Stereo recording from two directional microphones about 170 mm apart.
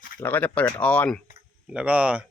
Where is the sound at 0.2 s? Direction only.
10° left (ahead or behind).